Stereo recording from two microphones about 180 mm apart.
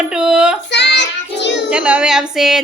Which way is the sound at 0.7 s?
70° left (ahead or behind).